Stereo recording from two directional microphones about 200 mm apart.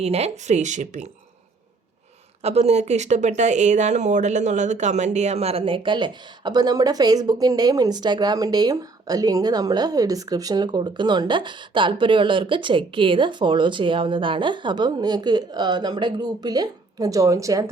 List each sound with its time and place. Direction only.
0.0 s speech: 30° right (ahead or behind)
2.4 s speech: 30° right (ahead or behind); by 17.7 s 15° right (ahead or behind)